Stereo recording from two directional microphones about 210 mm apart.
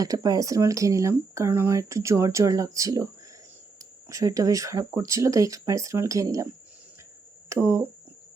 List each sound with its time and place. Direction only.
0.0 s speech: 15° right (ahead or behind)
4.1 s speech: 15° right (ahead or behind)
7.5 s speech: 15° right (ahead or behind)